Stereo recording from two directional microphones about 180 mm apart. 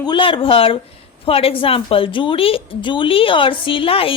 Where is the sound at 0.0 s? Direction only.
25° left (ahead or behind).